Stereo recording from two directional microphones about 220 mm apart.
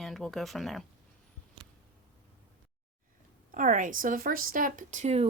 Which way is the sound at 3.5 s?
35° right (ahead or behind).